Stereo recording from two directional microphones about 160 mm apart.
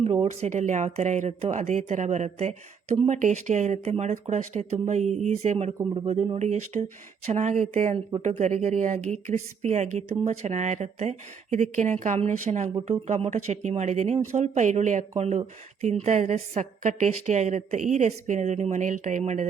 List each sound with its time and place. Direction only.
0.0 s speech: 35° right (ahead or behind)
0.3 s speech: 50° right (ahead or behind)